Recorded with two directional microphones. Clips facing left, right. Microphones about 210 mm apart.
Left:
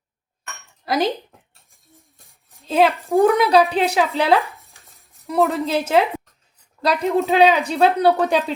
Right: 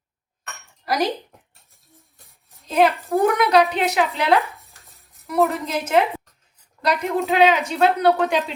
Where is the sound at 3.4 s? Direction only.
30° left (ahead or behind).